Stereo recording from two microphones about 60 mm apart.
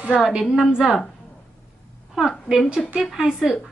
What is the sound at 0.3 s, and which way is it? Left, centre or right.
Speech, centre.